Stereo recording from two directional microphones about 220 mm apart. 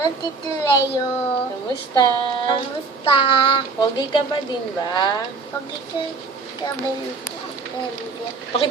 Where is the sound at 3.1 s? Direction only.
25° left (ahead or behind).